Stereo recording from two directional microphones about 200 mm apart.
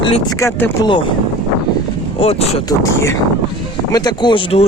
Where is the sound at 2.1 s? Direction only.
30° left (ahead or behind).